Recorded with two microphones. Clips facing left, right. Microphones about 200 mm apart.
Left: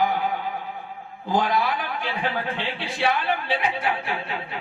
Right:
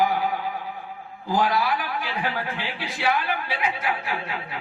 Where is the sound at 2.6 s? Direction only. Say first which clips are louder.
Left 3 dB; 30° left (ahead or behind).